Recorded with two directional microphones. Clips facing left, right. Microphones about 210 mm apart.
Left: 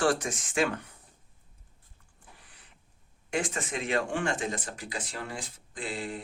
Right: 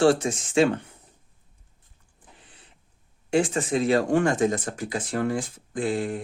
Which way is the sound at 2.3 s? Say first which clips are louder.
Right 4 dB; 25° right (ahead or behind).